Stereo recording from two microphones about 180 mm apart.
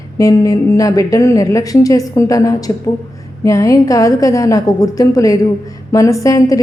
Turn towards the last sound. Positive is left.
turn(degrees=20)  # may be behind; listen again after turning